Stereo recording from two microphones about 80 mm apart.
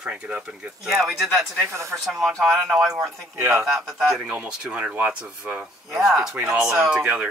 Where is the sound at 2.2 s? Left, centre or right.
Centre.